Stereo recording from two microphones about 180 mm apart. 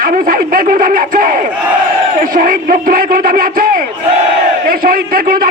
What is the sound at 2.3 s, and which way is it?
Speech, 50° right (ahead or behind).